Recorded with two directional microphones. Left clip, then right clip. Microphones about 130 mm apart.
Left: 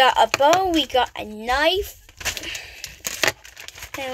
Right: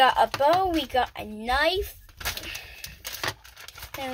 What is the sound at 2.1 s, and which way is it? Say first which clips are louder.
Gunshot: left 5 dB; 25° left (ahead or behind).